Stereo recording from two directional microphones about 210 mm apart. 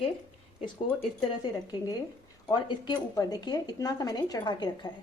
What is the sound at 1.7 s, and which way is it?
Speech, 20° left (ahead or behind).